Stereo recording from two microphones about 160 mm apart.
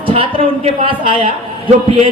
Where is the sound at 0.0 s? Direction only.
35° right (ahead or behind).